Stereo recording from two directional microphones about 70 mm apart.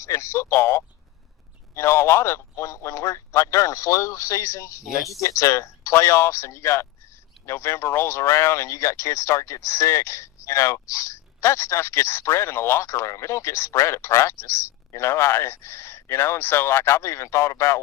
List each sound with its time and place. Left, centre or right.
0.0 s speech: left